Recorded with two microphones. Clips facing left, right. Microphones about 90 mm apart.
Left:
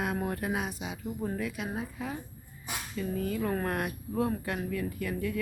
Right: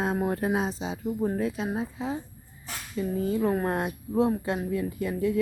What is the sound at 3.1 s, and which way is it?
A woman's voice, 25° right (ahead or behind).